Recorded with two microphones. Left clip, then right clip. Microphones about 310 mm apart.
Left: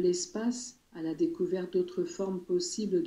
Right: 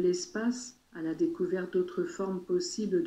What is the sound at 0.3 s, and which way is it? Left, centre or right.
Speech, centre.